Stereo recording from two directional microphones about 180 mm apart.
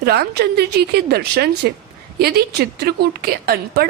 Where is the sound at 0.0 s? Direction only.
60° right (ahead or behind).